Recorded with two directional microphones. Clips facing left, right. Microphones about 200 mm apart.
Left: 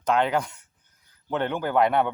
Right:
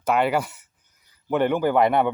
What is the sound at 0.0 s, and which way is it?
Speech, 5° right (ahead or behind).